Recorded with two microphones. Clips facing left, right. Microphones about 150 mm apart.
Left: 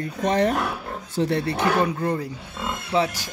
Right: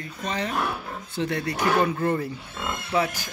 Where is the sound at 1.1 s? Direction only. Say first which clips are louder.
Left 4 dB; 30° left (ahead or behind).